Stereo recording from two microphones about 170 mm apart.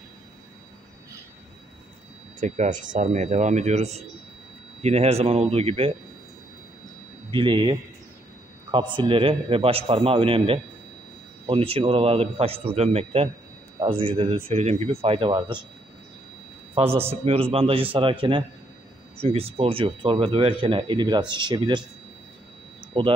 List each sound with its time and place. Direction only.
2.4 s a man's voice: 45° right (ahead or behind)
7.2 s speech: 30° right (ahead or behind)
8.7 s a man's voice: 30° right (ahead or behind)
16.8 s a man's voice: 30° right (ahead or behind)
23.0 s speech: 30° right (ahead or behind)